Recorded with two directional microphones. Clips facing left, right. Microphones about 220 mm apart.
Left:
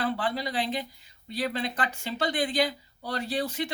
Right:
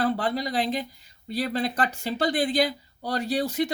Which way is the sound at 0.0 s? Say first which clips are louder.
Right 4 dB; 40° right (ahead or behind).